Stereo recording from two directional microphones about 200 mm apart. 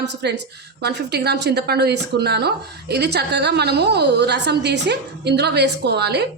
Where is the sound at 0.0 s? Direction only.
60° right (ahead or behind).